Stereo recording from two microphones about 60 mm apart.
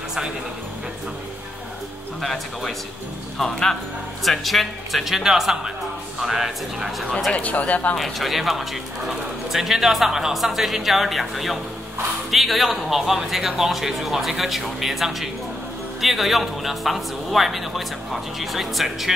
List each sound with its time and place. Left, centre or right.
2.2 s speech: centre
7.3 s speech: left
8.0 s speech: centre